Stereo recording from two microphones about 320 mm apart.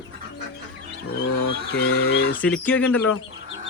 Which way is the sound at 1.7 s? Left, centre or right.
Left.